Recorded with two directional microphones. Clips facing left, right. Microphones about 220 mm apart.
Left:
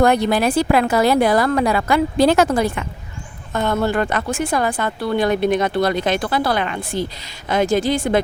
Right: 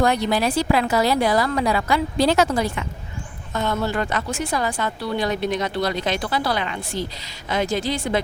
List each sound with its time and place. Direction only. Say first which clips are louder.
0.0 s speech: left 4 dB; 55° left (ahead or behind)